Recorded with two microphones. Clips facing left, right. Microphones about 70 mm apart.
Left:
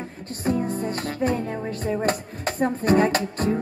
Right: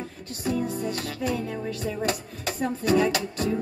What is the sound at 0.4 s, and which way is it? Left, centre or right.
Music, left.